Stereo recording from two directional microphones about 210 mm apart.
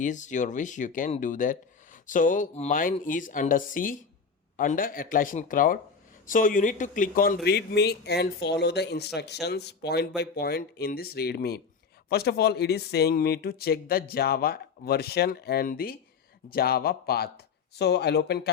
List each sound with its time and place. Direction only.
0.0 s speech: 35° left (ahead or behind)
7.4 s speech: 50° left (ahead or behind)